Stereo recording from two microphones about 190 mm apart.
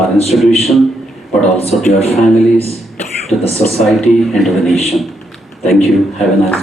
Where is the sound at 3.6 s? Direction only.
Centre (ahead or behind).